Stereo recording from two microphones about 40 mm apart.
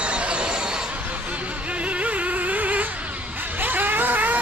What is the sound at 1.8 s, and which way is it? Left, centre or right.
Mosquito, right.